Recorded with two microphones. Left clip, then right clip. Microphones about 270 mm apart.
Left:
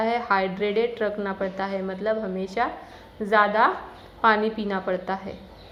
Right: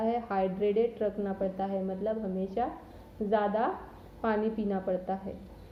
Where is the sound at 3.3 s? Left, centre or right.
Centre.